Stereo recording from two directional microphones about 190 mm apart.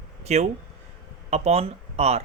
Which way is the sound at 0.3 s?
35° right (ahead or behind).